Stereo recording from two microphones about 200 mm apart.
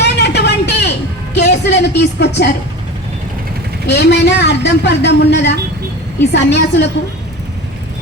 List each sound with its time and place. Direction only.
0.0 s music: 55° left (ahead or behind)
3.8 s a woman's voice: 55° left (ahead or behind)